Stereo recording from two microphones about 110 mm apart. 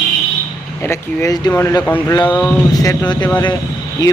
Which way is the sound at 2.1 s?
15° left (ahead or behind).